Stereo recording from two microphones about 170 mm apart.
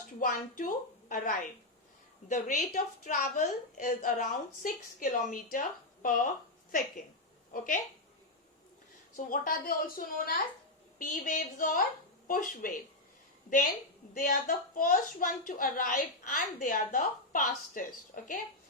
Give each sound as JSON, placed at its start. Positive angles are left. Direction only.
{"t": 0.2, "sound": "a woman's voice", "side_deg": 50}
{"t": 9.1, "sound": "a woman's voice", "side_deg": 55}
{"t": 14.1, "sound": "a woman's voice", "side_deg": 55}